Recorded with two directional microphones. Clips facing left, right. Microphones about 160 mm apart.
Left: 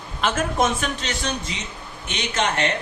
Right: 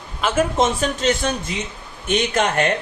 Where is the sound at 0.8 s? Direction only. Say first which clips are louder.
Right 7 dB; 45° right (ahead or behind).